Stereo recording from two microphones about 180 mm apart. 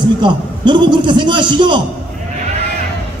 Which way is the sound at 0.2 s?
25° right (ahead or behind).